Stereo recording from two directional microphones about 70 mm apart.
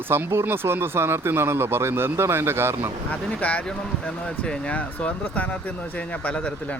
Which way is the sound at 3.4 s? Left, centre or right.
Left.